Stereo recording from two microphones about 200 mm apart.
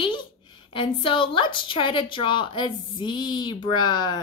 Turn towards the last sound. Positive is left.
turn(degrees=20)  # may be behind; listen again after turning